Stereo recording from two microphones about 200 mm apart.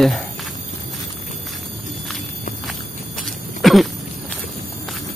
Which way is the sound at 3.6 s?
Centre (ahead or behind).